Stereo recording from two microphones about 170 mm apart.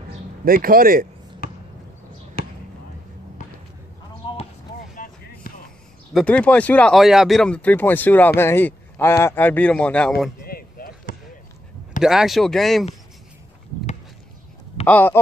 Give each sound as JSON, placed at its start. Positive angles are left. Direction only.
{"t": 0.5, "sound": "speech", "side_deg": -60}
{"t": 2.4, "sound": "basketball bounce", "side_deg": 65}
{"t": 4.2, "sound": "basketball bounce", "side_deg": 30}
{"t": 4.9, "sound": "a sound", "side_deg": 55}
{"t": 6.1, "sound": "speech", "side_deg": 5}
{"t": 10.4, "sound": "a sound", "side_deg": 60}
{"t": 12.0, "sound": "speech", "side_deg": -5}
{"t": 14.9, "sound": "speech", "side_deg": 10}